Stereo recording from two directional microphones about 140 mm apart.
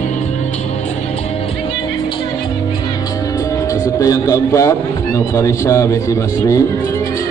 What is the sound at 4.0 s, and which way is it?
A man's voice, 25° left (ahead or behind).